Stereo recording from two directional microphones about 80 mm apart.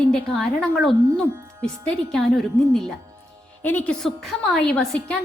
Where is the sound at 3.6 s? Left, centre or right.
Centre.